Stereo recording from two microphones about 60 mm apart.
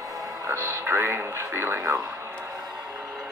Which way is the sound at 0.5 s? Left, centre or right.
Right.